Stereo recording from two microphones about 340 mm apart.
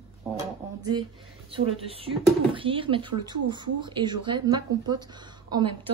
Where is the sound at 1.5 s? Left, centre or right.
Centre.